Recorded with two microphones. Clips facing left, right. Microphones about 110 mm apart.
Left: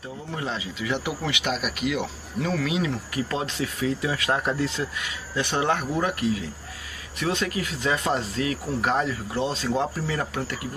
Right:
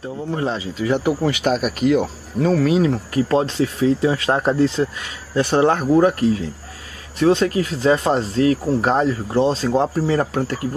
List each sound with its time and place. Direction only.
0.3 s speech: 35° right (ahead or behind)